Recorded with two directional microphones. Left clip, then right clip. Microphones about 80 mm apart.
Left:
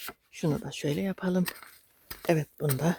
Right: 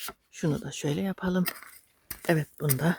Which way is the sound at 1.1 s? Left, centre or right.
Centre.